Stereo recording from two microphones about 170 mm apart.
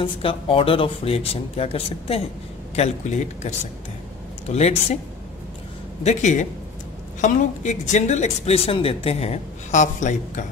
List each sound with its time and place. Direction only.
0.0 s speech: 30° left (ahead or behind)
4.5 s speech: 40° left (ahead or behind)
6.0 s speech: 45° left (ahead or behind)